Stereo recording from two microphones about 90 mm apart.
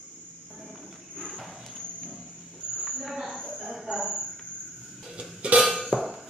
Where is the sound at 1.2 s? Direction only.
Centre (ahead or behind).